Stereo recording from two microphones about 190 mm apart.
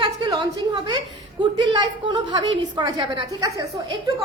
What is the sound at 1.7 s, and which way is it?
A woman's voice, 25° right (ahead or behind).